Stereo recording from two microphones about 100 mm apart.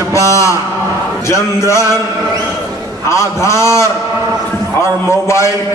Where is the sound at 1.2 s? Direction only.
30° left (ahead or behind).